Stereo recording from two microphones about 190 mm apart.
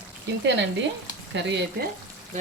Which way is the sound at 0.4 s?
70° right (ahead or behind).